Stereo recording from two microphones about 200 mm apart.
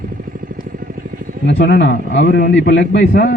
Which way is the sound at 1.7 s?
60° left (ahead or behind).